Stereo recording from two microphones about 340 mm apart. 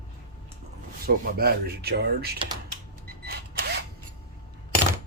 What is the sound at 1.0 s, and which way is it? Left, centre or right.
Speech, right.